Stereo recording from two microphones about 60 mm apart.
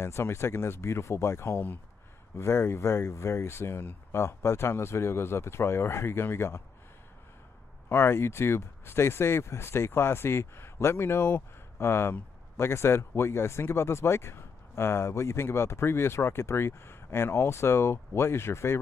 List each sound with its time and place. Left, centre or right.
0.0 s speech: left
7.9 s speech: left